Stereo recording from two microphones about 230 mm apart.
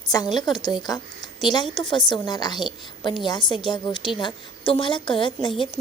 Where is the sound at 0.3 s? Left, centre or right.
Centre.